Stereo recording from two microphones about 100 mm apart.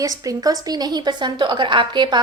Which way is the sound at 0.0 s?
35° right (ahead or behind).